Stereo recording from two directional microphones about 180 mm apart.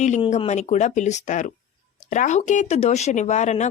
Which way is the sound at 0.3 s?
40° left (ahead or behind).